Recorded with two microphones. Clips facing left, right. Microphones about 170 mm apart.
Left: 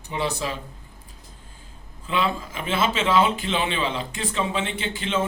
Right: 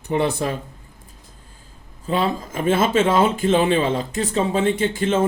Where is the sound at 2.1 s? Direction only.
40° right (ahead or behind).